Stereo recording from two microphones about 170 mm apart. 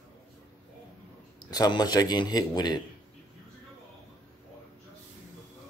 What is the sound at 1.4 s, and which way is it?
Speech, 20° left (ahead or behind).